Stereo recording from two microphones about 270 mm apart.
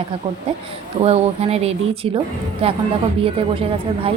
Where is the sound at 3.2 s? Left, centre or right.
Centre.